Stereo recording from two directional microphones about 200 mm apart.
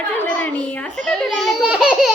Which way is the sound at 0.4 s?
5° left (ahead or behind).